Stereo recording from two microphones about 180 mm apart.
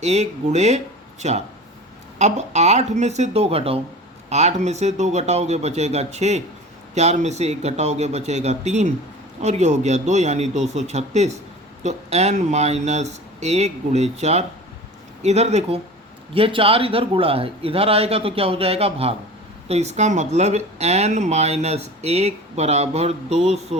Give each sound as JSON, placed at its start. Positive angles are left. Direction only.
{"t": 0.0, "sound": "speech", "side_deg": -40}